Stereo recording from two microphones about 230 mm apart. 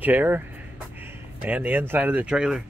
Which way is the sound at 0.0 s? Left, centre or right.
Centre.